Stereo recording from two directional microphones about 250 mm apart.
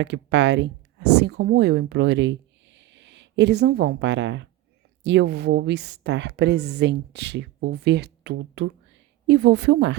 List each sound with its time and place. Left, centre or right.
0.0 s speech: right